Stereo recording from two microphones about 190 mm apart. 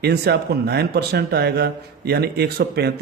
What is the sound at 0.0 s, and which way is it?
Speech, 60° right (ahead or behind).